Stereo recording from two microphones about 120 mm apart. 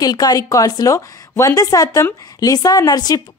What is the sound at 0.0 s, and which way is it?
A woman's voice, 35° left (ahead or behind).